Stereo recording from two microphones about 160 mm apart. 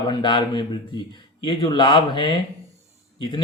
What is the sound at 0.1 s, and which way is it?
A man's voice, 30° left (ahead or behind).